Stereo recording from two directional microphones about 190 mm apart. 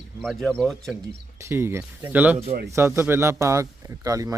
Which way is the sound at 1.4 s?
10° right (ahead or behind).